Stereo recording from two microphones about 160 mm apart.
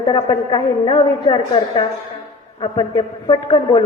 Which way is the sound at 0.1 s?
30° left (ahead or behind).